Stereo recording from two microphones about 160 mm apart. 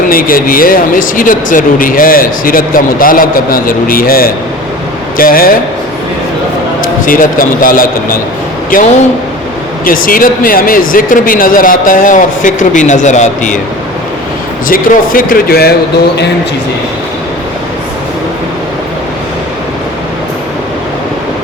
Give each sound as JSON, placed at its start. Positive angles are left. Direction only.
{"t": 0.1, "sound": "speech", "side_deg": 65}
{"t": 7.0, "sound": "speech", "side_deg": 60}
{"t": 14.7, "sound": "speech", "side_deg": 60}